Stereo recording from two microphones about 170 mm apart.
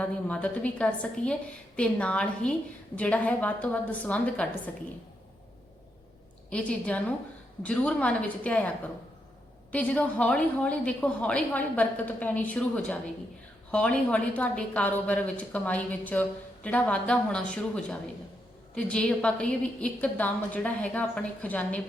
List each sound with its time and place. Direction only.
0.0 s a woman's voice: 5° left (ahead or behind)
6.5 s a woman's voice: 5° left (ahead or behind)
9.7 s a woman's voice: 10° left (ahead or behind)